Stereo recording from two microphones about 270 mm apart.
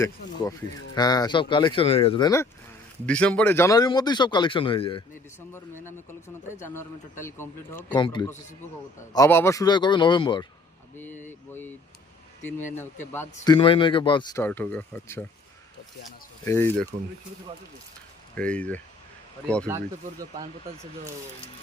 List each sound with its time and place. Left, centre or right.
0.9 s speech: centre
16.4 s speech: centre
18.3 s speech: centre
19.6 s speech: centre